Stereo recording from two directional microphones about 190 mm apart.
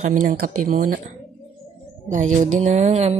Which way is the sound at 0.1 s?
45° right (ahead or behind).